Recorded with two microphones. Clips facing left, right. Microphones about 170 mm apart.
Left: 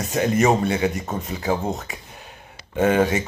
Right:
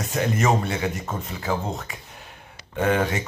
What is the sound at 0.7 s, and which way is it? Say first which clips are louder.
Speech: left 4 dB; 20° left (ahead or behind).